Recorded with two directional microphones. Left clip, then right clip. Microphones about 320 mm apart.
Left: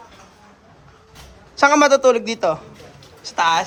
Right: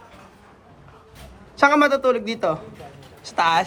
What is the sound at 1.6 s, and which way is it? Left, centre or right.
A woman's voice, centre.